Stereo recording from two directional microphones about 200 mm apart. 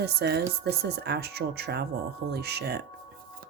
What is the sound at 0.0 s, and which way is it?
A woman's voice, 55° right (ahead or behind).